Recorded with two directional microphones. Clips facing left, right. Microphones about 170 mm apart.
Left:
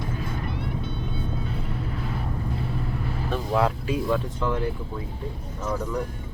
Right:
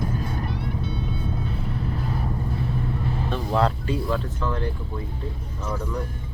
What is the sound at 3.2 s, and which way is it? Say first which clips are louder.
Speech: even; 5° left (ahead or behind).